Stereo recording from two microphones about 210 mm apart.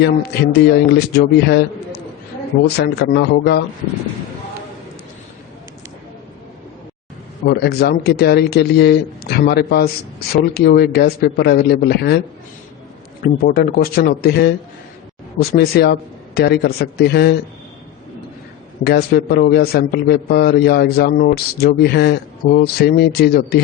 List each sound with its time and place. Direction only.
0.0 s a man's voice: 50° left (ahead or behind)
2.7 s a man's voice: 50° left (ahead or behind)
7.4 s a man's voice: 50° left (ahead or behind)
13.2 s a man's voice: 45° left (ahead or behind)
18.9 s a man's voice: 50° left (ahead or behind)